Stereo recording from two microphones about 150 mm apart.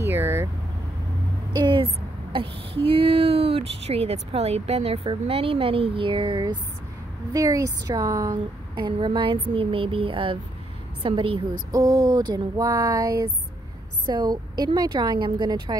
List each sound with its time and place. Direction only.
0.0 s vehicle: 15° right (ahead or behind)
1.6 s a woman's voice: 35° right (ahead or behind)